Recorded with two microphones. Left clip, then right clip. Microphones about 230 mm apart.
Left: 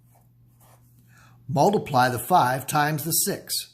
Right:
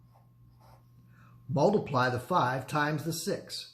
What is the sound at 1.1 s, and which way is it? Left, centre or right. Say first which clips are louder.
Speech: left 7 dB; left.